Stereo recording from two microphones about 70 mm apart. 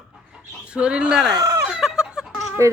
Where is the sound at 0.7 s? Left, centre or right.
Centre.